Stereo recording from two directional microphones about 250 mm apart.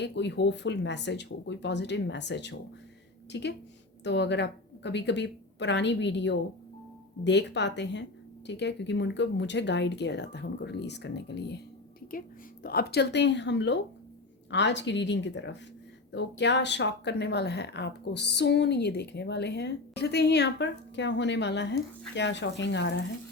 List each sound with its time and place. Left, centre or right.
0.0 s a woman's voice: left